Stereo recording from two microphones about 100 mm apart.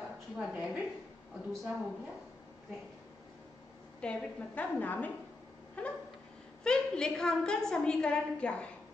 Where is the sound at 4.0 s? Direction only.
15° left (ahead or behind).